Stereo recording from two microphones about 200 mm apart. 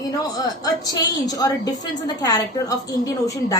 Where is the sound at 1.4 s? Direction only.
20° left (ahead or behind).